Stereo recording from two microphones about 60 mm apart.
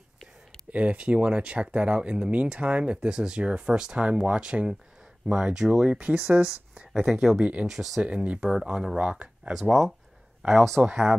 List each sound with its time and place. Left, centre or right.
0.7 s speech: right; by 8.0 s centre
8.0 s speech: right
9.5 s speech: centre
10.8 s speech: centre